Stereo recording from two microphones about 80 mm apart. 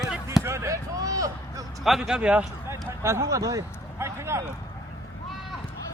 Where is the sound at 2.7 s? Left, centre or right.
Right.